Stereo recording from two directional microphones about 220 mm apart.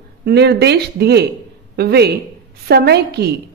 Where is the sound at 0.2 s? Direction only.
50° right (ahead or behind).